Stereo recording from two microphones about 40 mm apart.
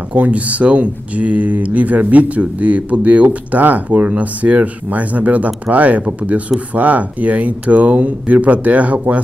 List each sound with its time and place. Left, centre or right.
0.1 s speech: right